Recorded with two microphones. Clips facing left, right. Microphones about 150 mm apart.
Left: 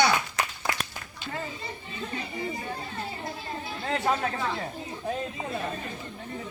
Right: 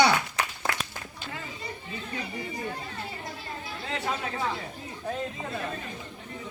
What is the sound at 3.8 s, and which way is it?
Chatter, 50° left (ahead or behind).